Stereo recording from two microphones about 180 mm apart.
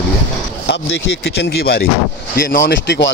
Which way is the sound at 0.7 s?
80° left.